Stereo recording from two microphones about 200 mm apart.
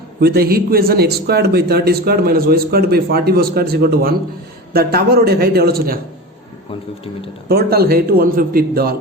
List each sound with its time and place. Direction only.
0.2 s a man's voice: 50° right (ahead or behind)
7.4 s a man's voice: 50° right (ahead or behind)